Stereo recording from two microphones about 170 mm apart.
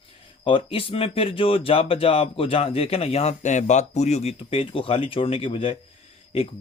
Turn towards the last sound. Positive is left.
turn(degrees=35)  # may be behind; listen again after turning